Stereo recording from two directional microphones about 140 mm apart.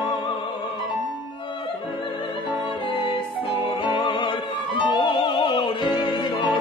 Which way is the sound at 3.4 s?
40° left (ahead or behind).